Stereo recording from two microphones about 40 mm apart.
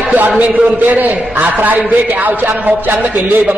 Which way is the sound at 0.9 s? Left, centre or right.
Right.